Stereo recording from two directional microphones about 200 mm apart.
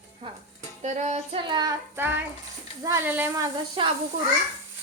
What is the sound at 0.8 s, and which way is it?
Child singing, 35° right (ahead or behind).